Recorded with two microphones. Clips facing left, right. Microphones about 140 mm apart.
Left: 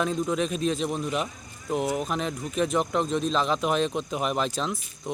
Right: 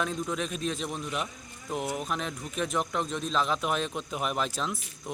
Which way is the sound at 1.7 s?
Centre (ahead or behind).